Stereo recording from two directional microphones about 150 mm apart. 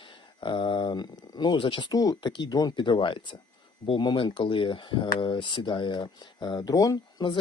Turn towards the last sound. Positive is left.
turn(degrees=25)  # may be behind; listen again after turning